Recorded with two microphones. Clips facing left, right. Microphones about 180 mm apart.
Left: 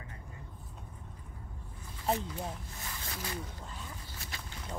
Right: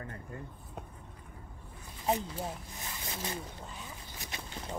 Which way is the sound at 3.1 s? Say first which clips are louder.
Right 2 dB; 25° right (ahead or behind).